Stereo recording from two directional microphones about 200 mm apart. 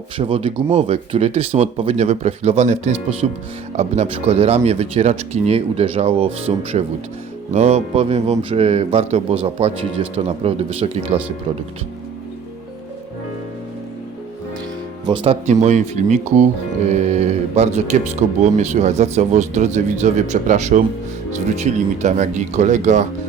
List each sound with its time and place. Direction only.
0.2 s speech: 30° right (ahead or behind)
15.0 s speech: 25° right (ahead or behind)